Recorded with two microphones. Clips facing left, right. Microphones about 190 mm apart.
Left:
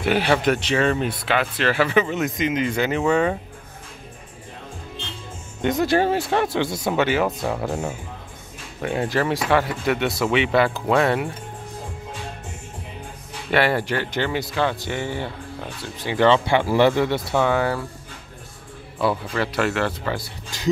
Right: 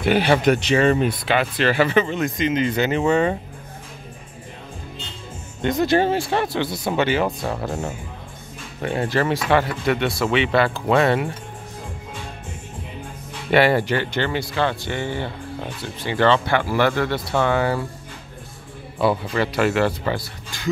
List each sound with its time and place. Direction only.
0.0 s speech: centre (ahead or behind)
5.8 s speech: 5° left (ahead or behind)
6.0 s speech: 10° right (ahead or behind)
6.9 s speech: 5° left (ahead or behind)
13.5 s a man's voice: centre (ahead or behind); by 17.2 s 20° left (ahead or behind)
17.4 s speech: 5° left (ahead or behind)
18.9 s speech: centre (ahead or behind)